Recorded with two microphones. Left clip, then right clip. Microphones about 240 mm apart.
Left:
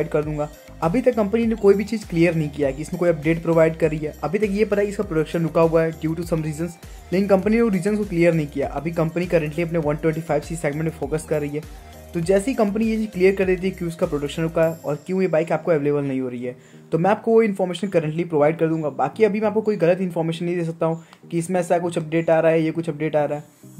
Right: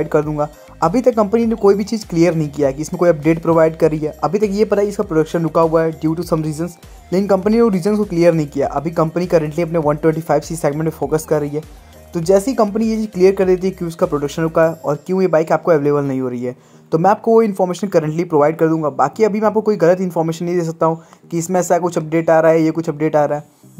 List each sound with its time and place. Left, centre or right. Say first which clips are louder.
0.0 s speech: right 6 dB; centre